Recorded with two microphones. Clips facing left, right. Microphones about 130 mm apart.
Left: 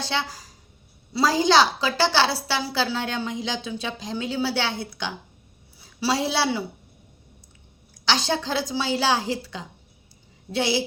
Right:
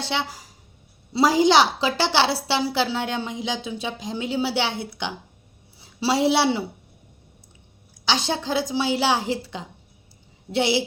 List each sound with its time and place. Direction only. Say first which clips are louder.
0.0 s a woman's voice: right 1 dB; 20° right (ahead or behind)
8.0 s a woman's voice: even; 20° right (ahead or behind)